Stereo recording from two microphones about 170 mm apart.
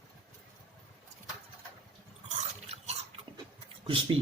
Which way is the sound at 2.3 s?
40° right (ahead or behind).